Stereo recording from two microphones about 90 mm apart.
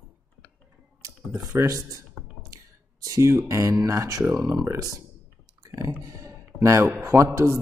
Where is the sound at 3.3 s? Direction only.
30° right (ahead or behind).